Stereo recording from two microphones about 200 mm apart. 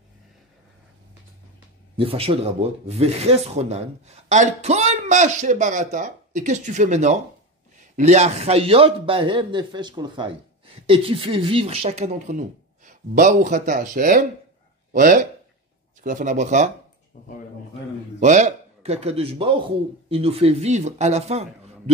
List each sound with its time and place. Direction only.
2.0 s a man's voice: 25° right (ahead or behind)
18.2 s speech: 35° right (ahead or behind)